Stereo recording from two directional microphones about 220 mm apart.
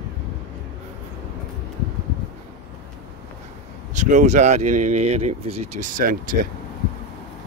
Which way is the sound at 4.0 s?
35° right (ahead or behind).